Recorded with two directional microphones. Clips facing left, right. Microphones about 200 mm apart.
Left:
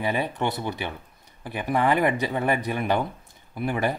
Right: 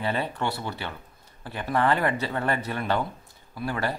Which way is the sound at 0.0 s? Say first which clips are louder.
Left 2 dB; 15° left (ahead or behind).